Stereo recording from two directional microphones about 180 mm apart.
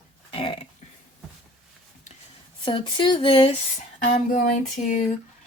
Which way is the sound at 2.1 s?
40° left (ahead or behind).